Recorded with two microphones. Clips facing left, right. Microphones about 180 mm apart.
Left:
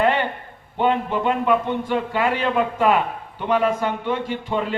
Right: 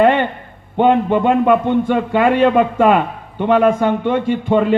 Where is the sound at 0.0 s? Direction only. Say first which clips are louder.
Right 7 dB; 55° right (ahead or behind).